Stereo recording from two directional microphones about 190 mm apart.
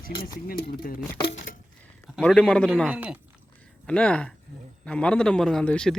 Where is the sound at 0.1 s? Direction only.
25° left (ahead or behind).